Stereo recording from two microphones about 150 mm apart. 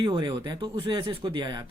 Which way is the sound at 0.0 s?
30° right (ahead or behind).